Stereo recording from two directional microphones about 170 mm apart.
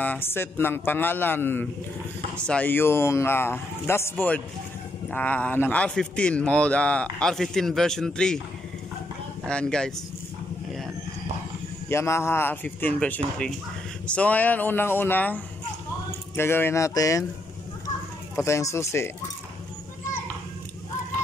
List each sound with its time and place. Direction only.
0.0 s a man's voice: 10° left (ahead or behind)
9.5 s speech: 5° left (ahead or behind)
11.9 s a man's voice: 15° left (ahead or behind)
17.8 s a sound: 15° left (ahead or behind)